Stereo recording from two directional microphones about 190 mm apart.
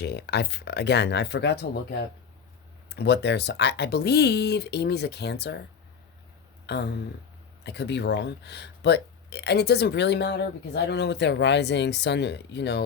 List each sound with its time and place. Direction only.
0.0 s speech: 60° left (ahead or behind)
6.7 s speech: 60° left (ahead or behind)